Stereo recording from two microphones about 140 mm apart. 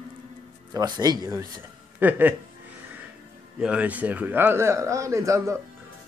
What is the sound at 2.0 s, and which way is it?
Speech, 10° right (ahead or behind).